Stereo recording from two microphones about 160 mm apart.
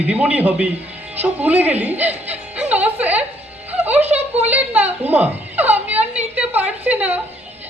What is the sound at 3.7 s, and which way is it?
Music, 10° right (ahead or behind).